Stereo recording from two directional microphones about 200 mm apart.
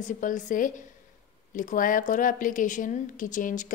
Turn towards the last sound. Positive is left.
turn(degrees=40)  # may be behind; listen again after turning